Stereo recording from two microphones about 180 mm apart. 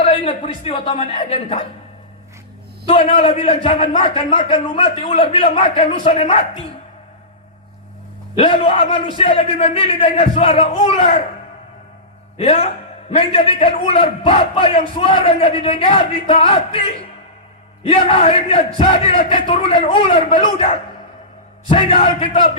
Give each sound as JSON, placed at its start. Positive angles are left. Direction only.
{"t": 0.0, "sound": "a man's voice", "side_deg": 35}
{"t": 2.8, "sound": "a man's voice", "side_deg": 30}
{"t": 8.4, "sound": "a man's voice", "side_deg": 35}
{"t": 12.4, "sound": "a man's voice", "side_deg": 35}
{"t": 17.8, "sound": "a man's voice", "side_deg": 30}